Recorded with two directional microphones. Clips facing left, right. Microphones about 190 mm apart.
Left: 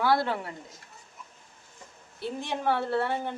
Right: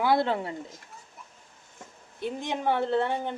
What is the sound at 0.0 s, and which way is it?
Speech, 20° right (ahead or behind).